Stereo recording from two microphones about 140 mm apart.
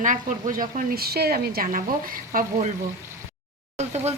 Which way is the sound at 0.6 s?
85° right.